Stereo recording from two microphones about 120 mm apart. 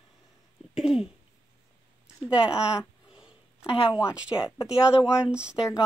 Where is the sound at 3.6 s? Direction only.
50° left (ahead or behind).